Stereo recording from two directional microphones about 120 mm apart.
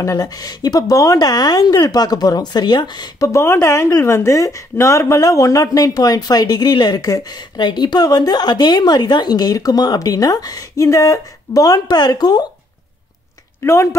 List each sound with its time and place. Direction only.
0.0 s speech: 30° left (ahead or behind)
13.6 s speech: 20° left (ahead or behind)